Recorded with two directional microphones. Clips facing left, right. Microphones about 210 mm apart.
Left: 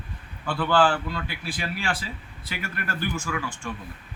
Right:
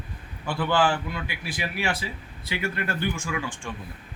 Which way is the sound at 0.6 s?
20° right (ahead or behind).